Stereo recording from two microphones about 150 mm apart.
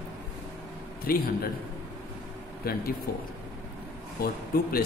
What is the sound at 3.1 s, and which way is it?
Speech, 80° left.